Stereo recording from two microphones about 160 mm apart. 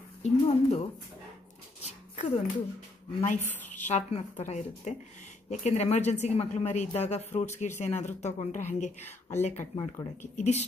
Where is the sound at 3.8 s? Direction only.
45° left (ahead or behind).